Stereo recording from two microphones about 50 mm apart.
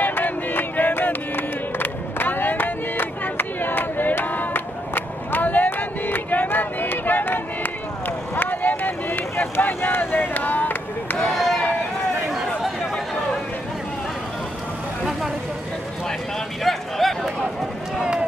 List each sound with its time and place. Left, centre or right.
0.0 s music: left
8.4 s vehicle: left
11.1 s chop: centre
17.0 s a sound: centre